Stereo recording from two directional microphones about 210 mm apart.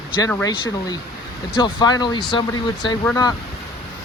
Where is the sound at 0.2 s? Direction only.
15° left (ahead or behind).